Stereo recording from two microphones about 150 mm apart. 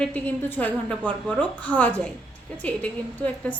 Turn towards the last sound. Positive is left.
turn(degrees=10)  # may be behind; listen again after turning